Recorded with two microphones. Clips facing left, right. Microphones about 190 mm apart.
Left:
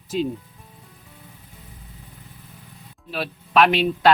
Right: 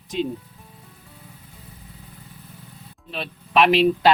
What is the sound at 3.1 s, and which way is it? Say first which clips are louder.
Speech: left 1 dB; centre (ahead or behind).